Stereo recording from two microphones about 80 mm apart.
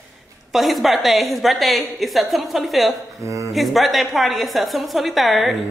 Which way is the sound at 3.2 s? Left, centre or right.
Right.